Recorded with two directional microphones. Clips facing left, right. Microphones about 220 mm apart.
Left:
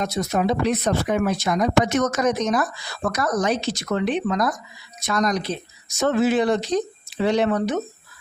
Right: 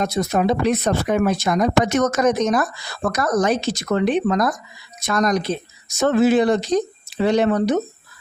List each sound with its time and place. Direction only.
0.0 s speech: 50° right (ahead or behind)